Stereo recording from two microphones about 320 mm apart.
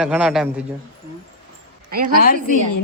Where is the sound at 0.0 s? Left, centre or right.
Centre.